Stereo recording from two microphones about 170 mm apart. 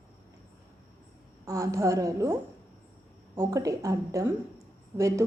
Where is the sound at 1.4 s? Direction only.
20° right (ahead or behind).